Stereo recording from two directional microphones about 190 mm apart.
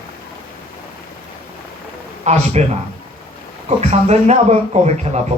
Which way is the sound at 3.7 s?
35° right (ahead or behind).